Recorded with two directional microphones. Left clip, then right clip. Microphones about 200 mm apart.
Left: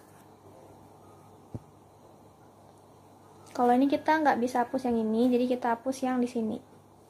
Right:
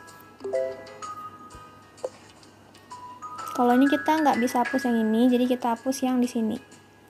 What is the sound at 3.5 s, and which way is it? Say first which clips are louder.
A woman's voice: right 3 dB; 30° right (ahead or behind).